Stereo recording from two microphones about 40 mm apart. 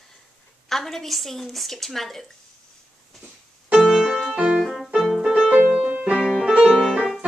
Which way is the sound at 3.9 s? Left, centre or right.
Centre.